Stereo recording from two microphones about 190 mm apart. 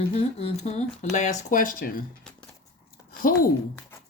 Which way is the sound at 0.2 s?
35° left (ahead or behind).